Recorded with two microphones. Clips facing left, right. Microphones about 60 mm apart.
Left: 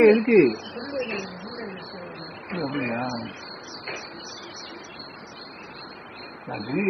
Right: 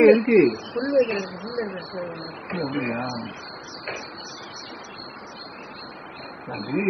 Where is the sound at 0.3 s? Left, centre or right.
Right.